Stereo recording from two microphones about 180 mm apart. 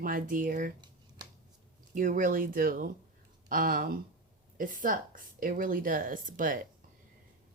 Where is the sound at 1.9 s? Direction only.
50° right (ahead or behind).